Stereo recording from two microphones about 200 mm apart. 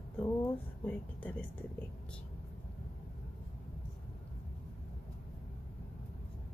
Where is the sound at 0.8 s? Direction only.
5° left (ahead or behind).